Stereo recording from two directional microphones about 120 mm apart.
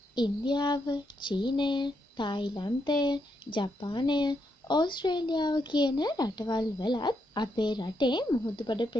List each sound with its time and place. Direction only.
0.1 s child singing: 40° left (ahead or behind)